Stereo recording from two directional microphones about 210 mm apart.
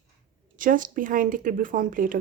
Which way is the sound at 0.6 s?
40° right (ahead or behind).